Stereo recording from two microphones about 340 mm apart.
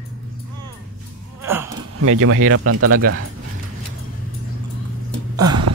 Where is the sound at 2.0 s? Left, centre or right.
Right.